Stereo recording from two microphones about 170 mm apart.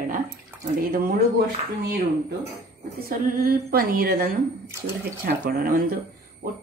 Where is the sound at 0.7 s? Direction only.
55° right (ahead or behind).